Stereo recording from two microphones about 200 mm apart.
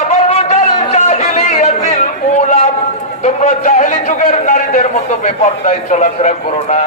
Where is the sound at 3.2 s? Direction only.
35° left (ahead or behind).